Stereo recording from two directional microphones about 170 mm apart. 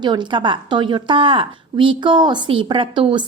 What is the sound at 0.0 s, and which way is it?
A woman's voice, 25° right (ahead or behind).